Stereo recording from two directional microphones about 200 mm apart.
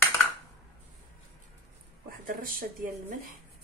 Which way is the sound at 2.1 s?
45° right (ahead or behind).